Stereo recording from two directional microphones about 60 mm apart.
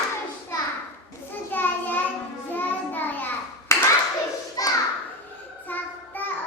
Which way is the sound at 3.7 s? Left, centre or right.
Left.